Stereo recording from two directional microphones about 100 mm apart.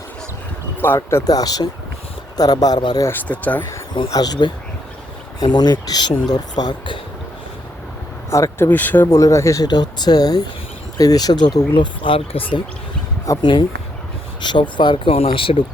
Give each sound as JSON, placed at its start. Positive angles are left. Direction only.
{"t": 0.8, "sound": "speech", "side_deg": 25}
{"t": 1.3, "sound": "speech", "side_deg": 40}
{"t": 3.1, "sound": "speech", "side_deg": 15}
{"t": 4.1, "sound": "speech", "side_deg": 40}
{"t": 8.3, "sound": "speech", "side_deg": 25}
{"t": 11.7, "sound": "speech", "side_deg": 55}
{"t": 15.3, "sound": "speech", "side_deg": 60}